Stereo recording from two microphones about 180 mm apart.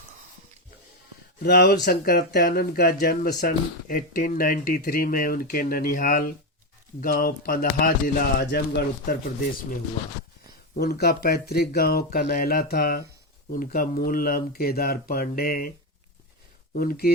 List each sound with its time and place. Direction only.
1.4 s speech: 60° left (ahead or behind)
10.8 s speech: 60° left (ahead or behind)
16.7 s speech: 55° left (ahead or behind)